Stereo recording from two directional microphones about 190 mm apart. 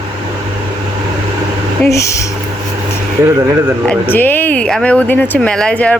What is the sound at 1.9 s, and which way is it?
Speech, 15° left (ahead or behind).